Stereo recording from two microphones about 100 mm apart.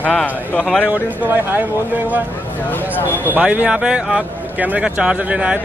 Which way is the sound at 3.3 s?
15° right (ahead or behind).